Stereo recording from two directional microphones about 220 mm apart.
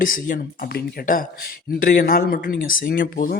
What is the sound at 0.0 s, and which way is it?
Speech, 40° left (ahead or behind).